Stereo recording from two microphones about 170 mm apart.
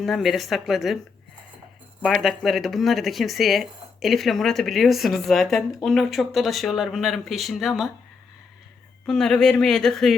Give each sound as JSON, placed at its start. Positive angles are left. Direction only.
{"t": 0.0, "sound": "speech", "side_deg": 0}
{"t": 2.0, "sound": "speech", "side_deg": 0}
{"t": 9.0, "sound": "speech", "side_deg": 5}